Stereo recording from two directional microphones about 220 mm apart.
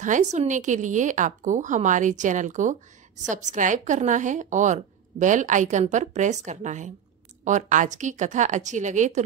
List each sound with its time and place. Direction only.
0.0 s a woman's voice: 35° right (ahead or behind)